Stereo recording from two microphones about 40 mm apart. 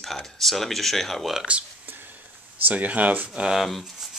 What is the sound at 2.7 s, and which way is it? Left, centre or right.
Speech, right.